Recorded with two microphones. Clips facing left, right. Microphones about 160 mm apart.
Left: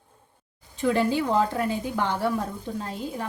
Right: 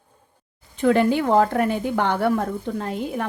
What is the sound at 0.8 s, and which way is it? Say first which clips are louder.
A woman's voice: right 5 dB; 60° right (ahead or behind).